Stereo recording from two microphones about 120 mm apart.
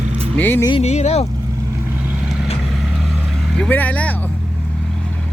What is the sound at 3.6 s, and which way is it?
Vehicle, 15° left (ahead or behind).